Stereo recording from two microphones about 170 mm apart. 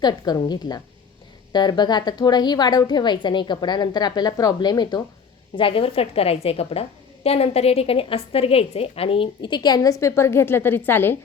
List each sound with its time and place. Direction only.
0.0 s a woman's voice: 25° left (ahead or behind)